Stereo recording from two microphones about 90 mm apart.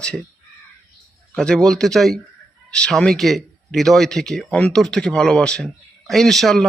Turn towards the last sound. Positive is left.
turn(degrees=0)  # may be behind; listen again after turning